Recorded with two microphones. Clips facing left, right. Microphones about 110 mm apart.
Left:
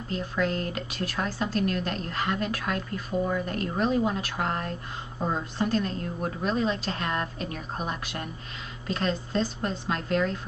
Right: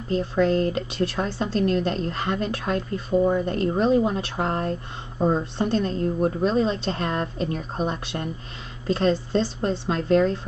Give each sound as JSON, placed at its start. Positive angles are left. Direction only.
{"t": 0.1, "sound": "a woman's voice", "side_deg": -30}